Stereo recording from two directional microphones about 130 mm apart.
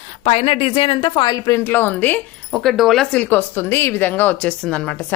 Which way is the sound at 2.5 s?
Centre (ahead or behind).